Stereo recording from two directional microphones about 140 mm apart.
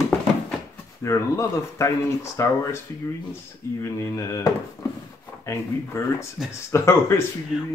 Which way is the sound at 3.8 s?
20° left (ahead or behind).